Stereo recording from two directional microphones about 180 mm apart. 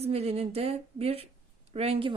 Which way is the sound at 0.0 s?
35° right (ahead or behind).